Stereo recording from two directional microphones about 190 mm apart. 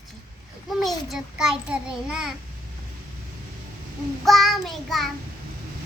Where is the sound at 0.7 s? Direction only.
Centre (ahead or behind).